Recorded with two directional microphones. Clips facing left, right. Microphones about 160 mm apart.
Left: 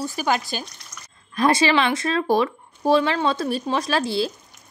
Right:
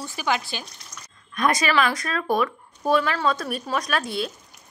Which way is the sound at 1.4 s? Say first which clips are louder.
Left 3 dB; 30° left (ahead or behind).